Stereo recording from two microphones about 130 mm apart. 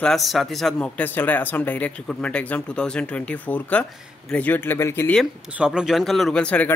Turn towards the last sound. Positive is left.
turn(degrees=10)  # may be behind; listen again after turning